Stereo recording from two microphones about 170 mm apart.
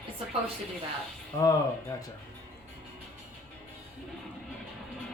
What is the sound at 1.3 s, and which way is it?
Speech, 20° left (ahead or behind).